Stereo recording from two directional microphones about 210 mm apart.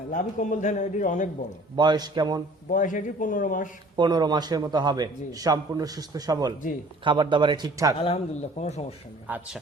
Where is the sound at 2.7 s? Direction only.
40° left (ahead or behind).